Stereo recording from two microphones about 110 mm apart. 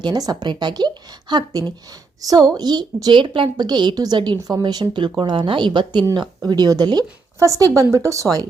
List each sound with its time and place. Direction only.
0.0 s a woman's voice: 40° right (ahead or behind)